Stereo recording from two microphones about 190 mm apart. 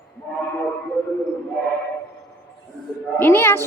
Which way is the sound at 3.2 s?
10° left (ahead or behind).